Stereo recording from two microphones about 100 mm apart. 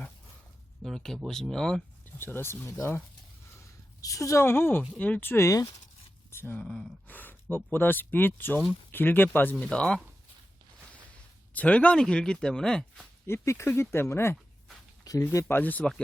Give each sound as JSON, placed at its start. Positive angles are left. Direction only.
{"t": 0.8, "sound": "speech", "side_deg": 5}
{"t": 2.1, "sound": "speech", "side_deg": 25}
{"t": 4.0, "sound": "speech", "side_deg": 30}
{"t": 6.7, "sound": "speech", "side_deg": 5}
{"t": 7.1, "sound": "a sound", "side_deg": 20}
{"t": 7.5, "sound": "speech", "side_deg": 20}
{"t": 11.5, "sound": "speech", "side_deg": 15}
{"t": 13.2, "sound": "speech", "side_deg": 25}
{"t": 15.5, "sound": "speech", "side_deg": 15}